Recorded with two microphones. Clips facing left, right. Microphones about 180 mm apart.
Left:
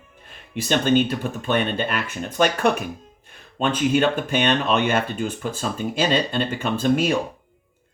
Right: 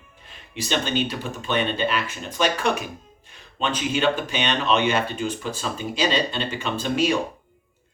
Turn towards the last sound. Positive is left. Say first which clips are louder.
# left 3 dB
turn(degrees=50)  # may be behind; listen again after turning